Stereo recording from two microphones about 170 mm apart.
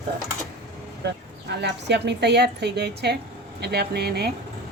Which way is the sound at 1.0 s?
80° right.